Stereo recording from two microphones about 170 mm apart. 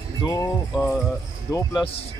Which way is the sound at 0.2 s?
20° left (ahead or behind).